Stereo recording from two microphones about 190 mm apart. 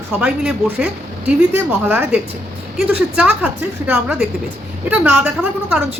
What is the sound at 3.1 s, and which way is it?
A woman's voice, 5° right (ahead or behind).